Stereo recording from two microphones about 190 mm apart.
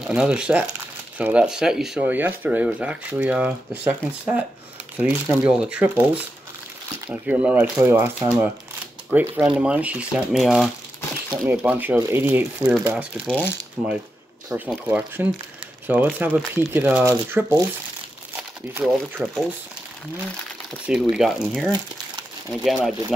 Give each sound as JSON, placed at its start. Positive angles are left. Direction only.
{"t": 0.0, "sound": "speech", "side_deg": -5}
{"t": 11.2, "sound": "speech", "side_deg": -15}
{"t": 13.3, "sound": "speech", "side_deg": 5}
{"t": 14.5, "sound": "speech", "side_deg": -10}
{"t": 20.8, "sound": "speech", "side_deg": 0}